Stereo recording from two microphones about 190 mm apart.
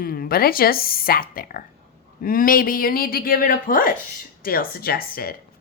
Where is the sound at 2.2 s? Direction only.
50° left (ahead or behind).